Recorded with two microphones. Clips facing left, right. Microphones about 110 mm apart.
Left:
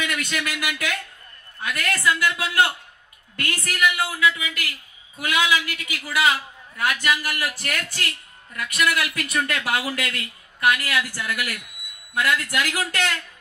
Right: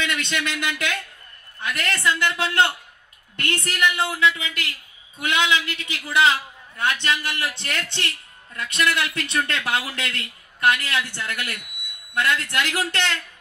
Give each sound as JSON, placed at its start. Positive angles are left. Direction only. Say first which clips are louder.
{"t": 0.0, "sound": "a woman's voice", "louder": "right 1 dB", "side_deg": -25}